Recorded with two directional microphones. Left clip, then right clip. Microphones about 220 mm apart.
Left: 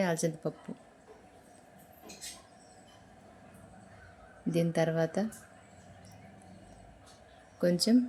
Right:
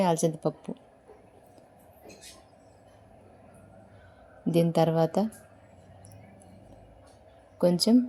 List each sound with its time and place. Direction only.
0.0 s a woman's voice: 20° right (ahead or behind)
4.5 s a woman's voice: 20° right (ahead or behind)
7.6 s speech: 15° right (ahead or behind)